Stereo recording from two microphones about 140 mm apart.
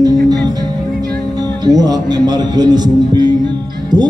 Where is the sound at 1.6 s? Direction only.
30° right (ahead or behind).